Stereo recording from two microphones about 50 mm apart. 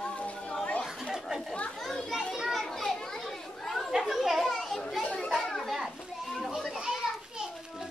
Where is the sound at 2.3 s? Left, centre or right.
Centre.